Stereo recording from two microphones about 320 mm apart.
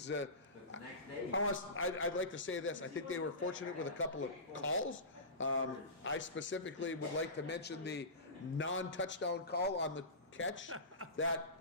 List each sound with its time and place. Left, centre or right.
0.0 s a man's voice: left
1.3 s a man's voice: left